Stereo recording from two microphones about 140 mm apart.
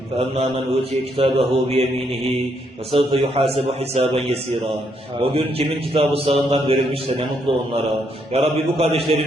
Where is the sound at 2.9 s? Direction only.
35° right (ahead or behind).